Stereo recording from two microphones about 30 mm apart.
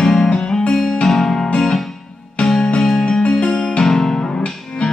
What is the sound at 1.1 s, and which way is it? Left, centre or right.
Music, centre.